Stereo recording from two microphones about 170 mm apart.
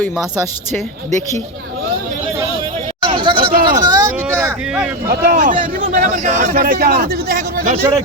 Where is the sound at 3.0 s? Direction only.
30° right (ahead or behind).